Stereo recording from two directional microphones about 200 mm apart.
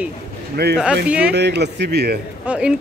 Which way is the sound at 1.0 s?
5° right (ahead or behind).